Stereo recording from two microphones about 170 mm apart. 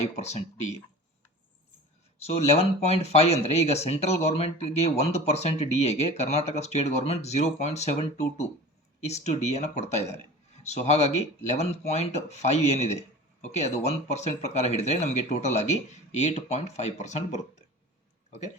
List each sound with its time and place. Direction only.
0.2 s speech: 40° left (ahead or behind)
2.1 s speech: 35° left (ahead or behind)